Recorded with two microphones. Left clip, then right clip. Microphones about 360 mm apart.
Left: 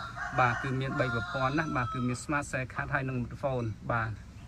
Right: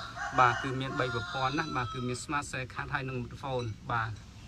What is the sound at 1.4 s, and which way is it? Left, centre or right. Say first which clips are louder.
Speech: left 1 dB; centre.